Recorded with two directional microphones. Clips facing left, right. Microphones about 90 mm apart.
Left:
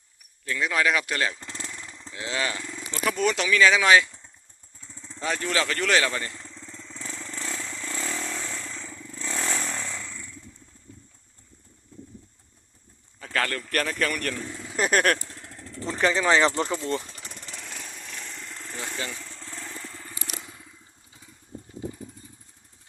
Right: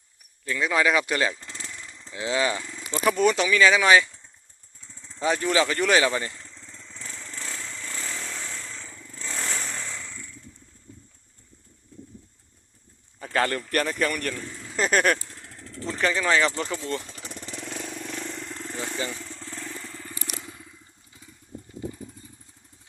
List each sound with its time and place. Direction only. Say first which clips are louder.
0.4 s speech: right 2 dB; 5° right (ahead or behind)
1.0 s a sound: right 2 dB; 5° right (ahead or behind)
1.7 s vehicle: left 1 dB; 10° left (ahead or behind)
2.0 s speech: right 5 dB; 10° right (ahead or behind)
5.2 s speech: right 4 dB; 10° right (ahead or behind)
6.7 s vehicle: left 3 dB; 10° left (ahead or behind)
9.8 s motorcycle: left 1 dB; centre (ahead or behind)
13.1 s speech: right 3 dB; 10° right (ahead or behind)
15.9 s speech: left 2 dB; 15° left (ahead or behind)
18.8 s vehicle: right 2 dB; centre (ahead or behind)